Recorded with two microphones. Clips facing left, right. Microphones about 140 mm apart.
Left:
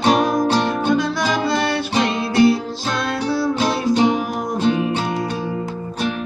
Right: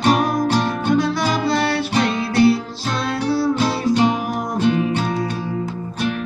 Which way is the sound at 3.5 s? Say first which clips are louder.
Even; 20° left (ahead or behind).